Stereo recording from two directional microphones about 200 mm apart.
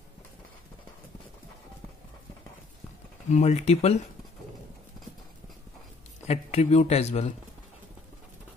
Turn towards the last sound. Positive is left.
turn(degrees=30)  # may be behind; listen again after turning